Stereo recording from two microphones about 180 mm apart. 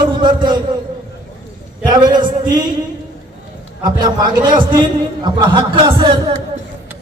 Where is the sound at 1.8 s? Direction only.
25° right (ahead or behind).